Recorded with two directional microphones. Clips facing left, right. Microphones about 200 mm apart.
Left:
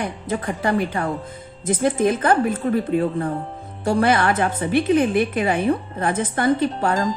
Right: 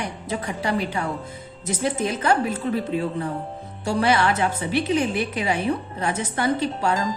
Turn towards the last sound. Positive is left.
turn(degrees=50)  # may be behind; listen again after turning